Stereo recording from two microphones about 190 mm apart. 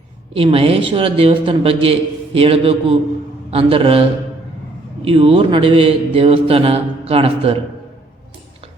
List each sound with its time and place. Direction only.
0.3 s a man's voice: 30° right (ahead or behind)
5.0 s a man's voice: 30° right (ahead or behind)